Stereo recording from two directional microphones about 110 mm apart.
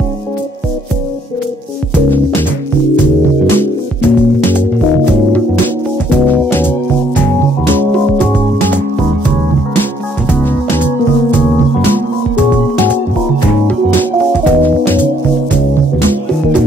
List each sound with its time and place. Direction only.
4.0 s music: 20° left (ahead or behind)
6.0 s music: 20° left (ahead or behind)
7.7 s music: 20° left (ahead or behind)
10.4 s music: 20° left (ahead or behind)